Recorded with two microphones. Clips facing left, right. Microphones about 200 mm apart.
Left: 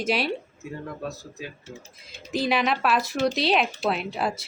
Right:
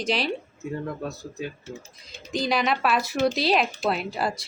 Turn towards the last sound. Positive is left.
turn(degrees=0)  # may be behind; listen again after turning